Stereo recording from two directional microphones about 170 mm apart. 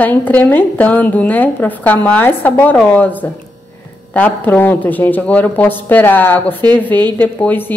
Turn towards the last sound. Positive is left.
turn(degrees=10)  # may be behind; listen again after turning